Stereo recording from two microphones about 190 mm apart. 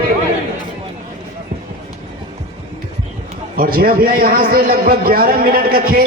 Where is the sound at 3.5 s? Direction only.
50° right (ahead or behind).